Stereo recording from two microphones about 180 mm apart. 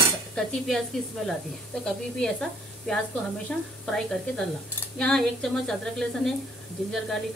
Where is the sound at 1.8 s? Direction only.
5° left (ahead or behind).